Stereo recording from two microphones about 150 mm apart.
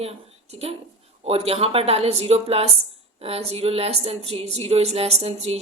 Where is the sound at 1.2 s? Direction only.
40° right (ahead or behind).